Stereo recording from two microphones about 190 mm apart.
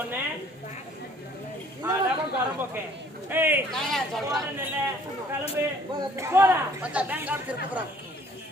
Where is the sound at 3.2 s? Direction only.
10° right (ahead or behind).